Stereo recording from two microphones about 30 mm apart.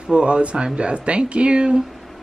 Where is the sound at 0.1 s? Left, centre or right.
Right.